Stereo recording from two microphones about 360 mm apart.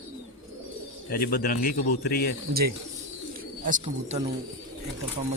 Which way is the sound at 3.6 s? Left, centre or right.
Centre.